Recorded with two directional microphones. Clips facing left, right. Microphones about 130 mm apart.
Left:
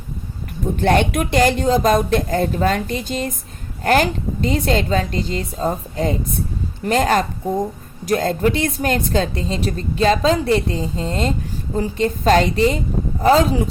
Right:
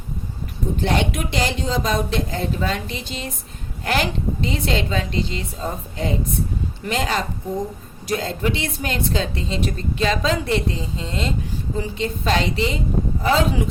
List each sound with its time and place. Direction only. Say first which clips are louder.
0.8 s a woman's voice: left 6 dB; 55° left (ahead or behind); by 13.7 s 35° left (ahead or behind)